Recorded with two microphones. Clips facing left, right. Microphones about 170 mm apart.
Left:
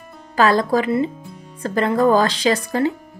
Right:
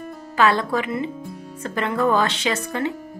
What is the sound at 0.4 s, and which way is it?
Speech, 40° left (ahead or behind).